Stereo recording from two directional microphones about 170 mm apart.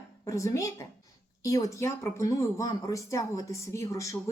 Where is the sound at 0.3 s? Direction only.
20° left (ahead or behind).